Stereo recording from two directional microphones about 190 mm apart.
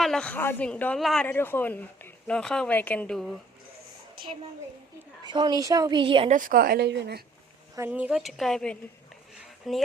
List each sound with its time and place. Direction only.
0.0 s a woman's voice: 5° left (ahead or behind)
5.2 s a woman's voice: 25° right (ahead or behind)
6.3 s a woman's voice: 45° right (ahead or behind); by 7.2 s 60° right (ahead or behind)
7.8 s speech: 10° right (ahead or behind)